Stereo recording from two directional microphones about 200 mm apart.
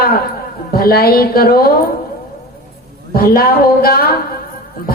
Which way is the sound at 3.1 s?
50° left (ahead or behind).